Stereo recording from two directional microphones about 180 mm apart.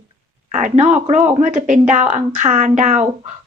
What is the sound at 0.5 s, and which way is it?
Speech, 40° right (ahead or behind).